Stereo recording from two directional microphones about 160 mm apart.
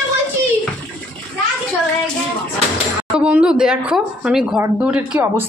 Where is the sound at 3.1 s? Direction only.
5° right (ahead or behind).